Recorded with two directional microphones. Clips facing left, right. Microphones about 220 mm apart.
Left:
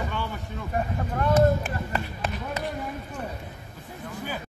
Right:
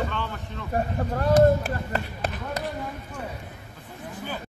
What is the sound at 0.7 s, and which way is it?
Speech, 35° right (ahead or behind).